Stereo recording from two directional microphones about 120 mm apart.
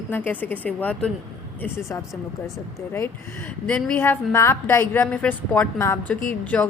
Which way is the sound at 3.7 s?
10° left (ahead or behind).